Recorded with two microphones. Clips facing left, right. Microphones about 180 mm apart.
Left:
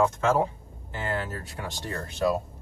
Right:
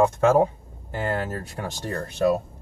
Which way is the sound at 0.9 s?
50° right (ahead or behind).